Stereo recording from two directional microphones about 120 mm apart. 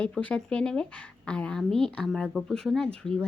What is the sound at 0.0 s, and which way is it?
A woman's voice, 10° left (ahead or behind).